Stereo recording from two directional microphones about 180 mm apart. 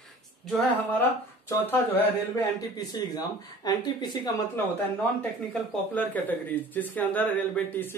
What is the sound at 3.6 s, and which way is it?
Speech, 25° left (ahead or behind).